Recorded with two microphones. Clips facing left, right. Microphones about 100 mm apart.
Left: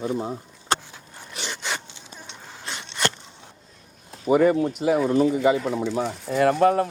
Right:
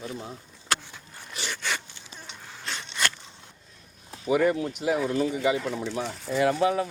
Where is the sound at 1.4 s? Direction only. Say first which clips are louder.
Left 1 dB; 20° left (ahead or behind).